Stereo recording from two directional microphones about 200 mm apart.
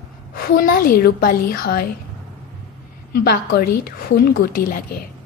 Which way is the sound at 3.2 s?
50° left (ahead or behind).